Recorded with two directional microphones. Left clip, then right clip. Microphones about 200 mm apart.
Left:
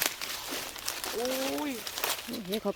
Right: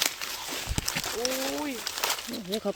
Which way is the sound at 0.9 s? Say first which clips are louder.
Right 2 dB; 15° right (ahead or behind).